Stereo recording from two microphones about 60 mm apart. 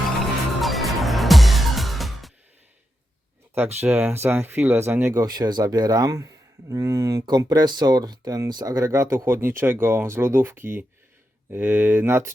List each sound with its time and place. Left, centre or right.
0.6 s music: centre
3.5 s speech: right
5.2 s speech: right
7.3 s speech: right
8.8 s speech: right